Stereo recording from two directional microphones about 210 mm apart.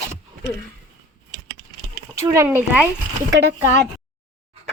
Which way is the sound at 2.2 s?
10° right (ahead or behind).